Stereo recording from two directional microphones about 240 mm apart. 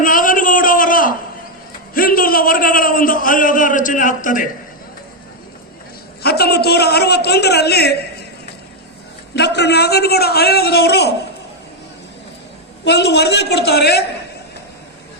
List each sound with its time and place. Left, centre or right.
0.0 s a sound: left
2.0 s a man's voice: left
6.2 s a man's voice: left
9.3 s a man's voice: left
12.8 s a man's voice: left